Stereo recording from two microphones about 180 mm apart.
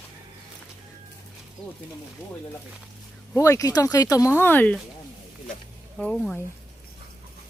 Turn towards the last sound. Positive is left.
turn(degrees=5)  # may be behind; listen again after turning